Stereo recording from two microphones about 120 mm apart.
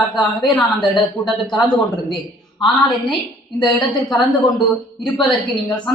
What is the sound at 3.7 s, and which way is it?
Speech, 5° left (ahead or behind).